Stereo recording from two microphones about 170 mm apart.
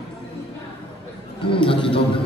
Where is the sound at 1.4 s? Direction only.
30° left (ahead or behind).